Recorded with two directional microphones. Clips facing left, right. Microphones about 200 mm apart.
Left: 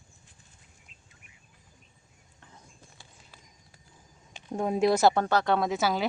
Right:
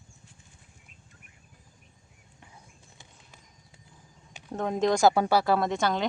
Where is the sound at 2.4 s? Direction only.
15° right (ahead or behind).